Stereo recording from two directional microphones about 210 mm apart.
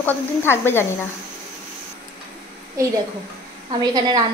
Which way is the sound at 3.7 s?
20° right (ahead or behind).